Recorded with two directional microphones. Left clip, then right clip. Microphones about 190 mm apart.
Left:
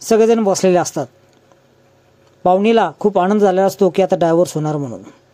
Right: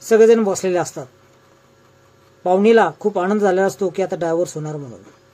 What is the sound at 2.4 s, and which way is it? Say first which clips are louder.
Speech: left 1 dB; 45° left (ahead or behind).